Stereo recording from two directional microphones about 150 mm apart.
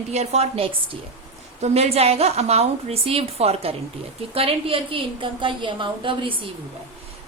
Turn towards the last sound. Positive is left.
turn(degrees=-35)  # may be behind; listen again after turning